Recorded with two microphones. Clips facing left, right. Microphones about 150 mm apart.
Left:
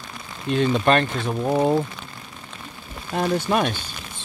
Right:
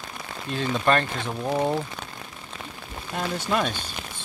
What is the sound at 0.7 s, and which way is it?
Speech, 20° left (ahead or behind).